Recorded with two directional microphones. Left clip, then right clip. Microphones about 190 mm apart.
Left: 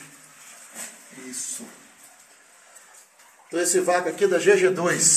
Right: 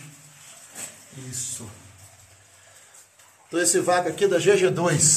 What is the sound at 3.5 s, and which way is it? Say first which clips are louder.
A man's voice: even; centre (ahead or behind).